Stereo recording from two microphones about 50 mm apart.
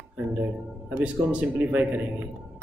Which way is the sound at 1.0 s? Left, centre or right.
Right.